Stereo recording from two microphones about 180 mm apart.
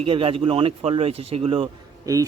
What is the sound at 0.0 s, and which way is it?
Speech, 30° right (ahead or behind).